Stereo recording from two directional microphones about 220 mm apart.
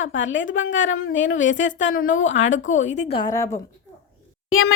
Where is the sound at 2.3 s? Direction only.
60° left (ahead or behind).